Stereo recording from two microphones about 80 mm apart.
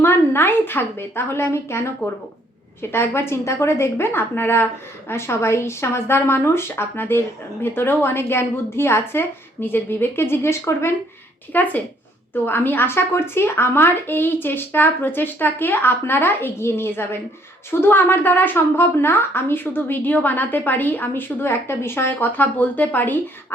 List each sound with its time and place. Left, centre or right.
0.0 s a woman's voice: left
11.5 s a woman's voice: left